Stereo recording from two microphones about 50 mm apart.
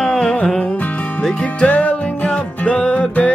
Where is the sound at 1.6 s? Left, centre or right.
Left.